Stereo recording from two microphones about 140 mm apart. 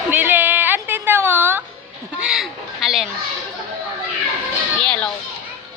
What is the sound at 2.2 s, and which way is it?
Crow, 5° right (ahead or behind).